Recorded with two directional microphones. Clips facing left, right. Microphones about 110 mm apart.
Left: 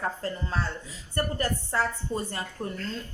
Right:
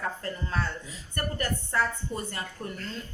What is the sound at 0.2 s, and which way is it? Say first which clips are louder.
A woman's voice: left 1 dB; 30° left (ahead or behind).